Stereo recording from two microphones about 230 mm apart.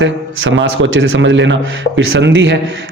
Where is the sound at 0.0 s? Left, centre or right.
Right.